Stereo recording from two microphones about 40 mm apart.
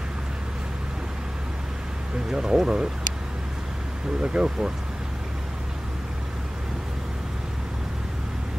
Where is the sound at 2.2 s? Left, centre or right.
Centre.